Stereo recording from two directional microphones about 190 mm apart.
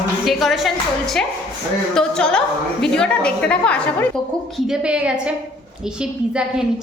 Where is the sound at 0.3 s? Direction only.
Centre (ahead or behind).